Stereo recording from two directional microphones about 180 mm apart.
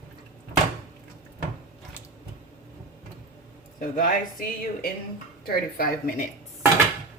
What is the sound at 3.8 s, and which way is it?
A woman's voice, 50° left (ahead or behind).